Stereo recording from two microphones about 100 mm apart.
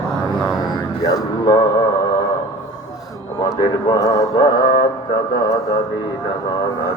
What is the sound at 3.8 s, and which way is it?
Speech, 40° left (ahead or behind).